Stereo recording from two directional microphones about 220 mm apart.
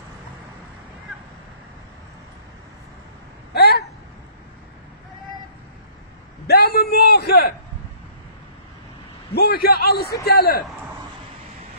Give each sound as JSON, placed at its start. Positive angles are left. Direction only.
{"t": 3.5, "sound": "a sound", "side_deg": 45}
{"t": 6.4, "sound": "a man's voice", "side_deg": 45}
{"t": 9.3, "sound": "a man's voice", "side_deg": 45}